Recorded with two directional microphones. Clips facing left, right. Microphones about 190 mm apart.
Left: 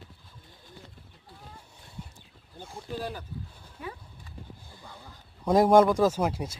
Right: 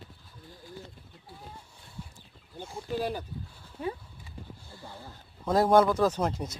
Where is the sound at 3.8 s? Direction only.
35° right (ahead or behind).